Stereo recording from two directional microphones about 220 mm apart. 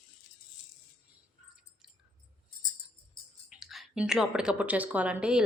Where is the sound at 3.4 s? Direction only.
Centre (ahead or behind).